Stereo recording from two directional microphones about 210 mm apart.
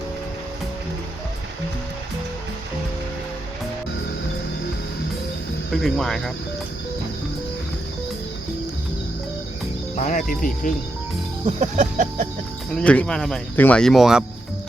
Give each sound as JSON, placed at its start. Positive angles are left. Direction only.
{"t": 5.7, "sound": "speech", "side_deg": 0}
{"t": 9.9, "sound": "speech", "side_deg": 35}
{"t": 11.4, "sound": "a sound", "side_deg": -35}
{"t": 12.7, "sound": "speech", "side_deg": 5}